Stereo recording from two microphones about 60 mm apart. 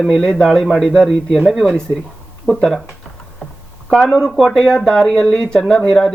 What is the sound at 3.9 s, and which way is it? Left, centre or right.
Speech, centre.